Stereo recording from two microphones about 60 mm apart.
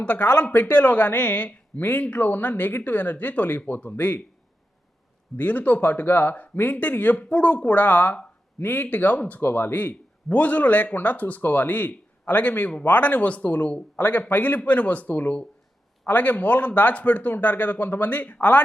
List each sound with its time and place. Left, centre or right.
0.0 s speech: left
5.4 s speech: left
9.4 s speech: left